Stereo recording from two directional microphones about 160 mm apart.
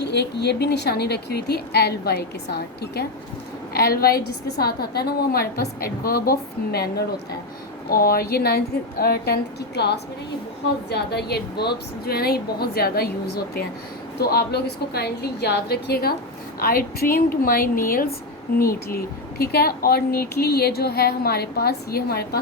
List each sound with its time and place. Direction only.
0.0 s a woman's voice: 90° left
3.7 s a woman's voice: 75° left (ahead or behind)
12.0 s a woman's voice: 75° left (ahead or behind)
16.6 s a woman's voice: 70° left (ahead or behind)